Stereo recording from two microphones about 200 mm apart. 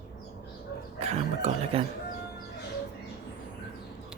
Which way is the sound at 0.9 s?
30° right (ahead or behind).